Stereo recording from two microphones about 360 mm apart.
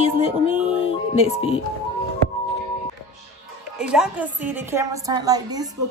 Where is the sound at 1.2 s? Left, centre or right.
Centre.